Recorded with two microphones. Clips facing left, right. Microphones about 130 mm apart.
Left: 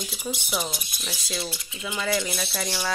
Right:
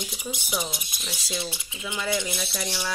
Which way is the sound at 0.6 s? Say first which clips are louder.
Left 1 dB; 20° right (ahead or behind).